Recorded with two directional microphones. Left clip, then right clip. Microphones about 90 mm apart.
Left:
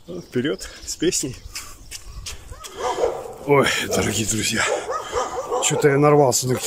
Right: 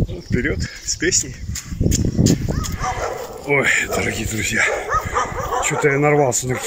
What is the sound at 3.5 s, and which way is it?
Speech, 35° left (ahead or behind).